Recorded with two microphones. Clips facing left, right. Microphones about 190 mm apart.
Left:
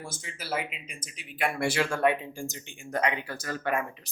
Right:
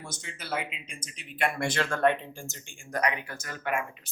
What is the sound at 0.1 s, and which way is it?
Speech, 5° left (ahead or behind).